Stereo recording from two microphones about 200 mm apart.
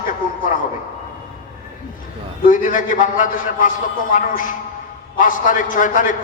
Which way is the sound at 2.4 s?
40° left (ahead or behind).